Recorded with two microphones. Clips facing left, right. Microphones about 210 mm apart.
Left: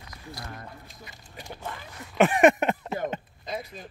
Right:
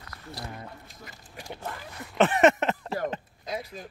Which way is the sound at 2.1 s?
15° left (ahead or behind).